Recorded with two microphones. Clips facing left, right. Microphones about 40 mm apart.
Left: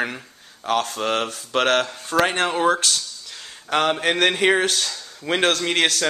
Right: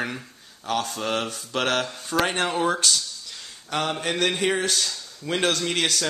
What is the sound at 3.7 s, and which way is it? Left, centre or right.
Mantra, left.